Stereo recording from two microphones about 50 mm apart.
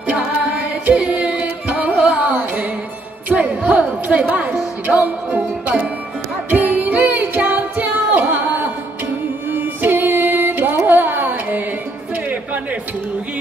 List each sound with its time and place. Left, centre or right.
0.5 s carnatic music: right
3.3 s music: right
10.9 s a sound: right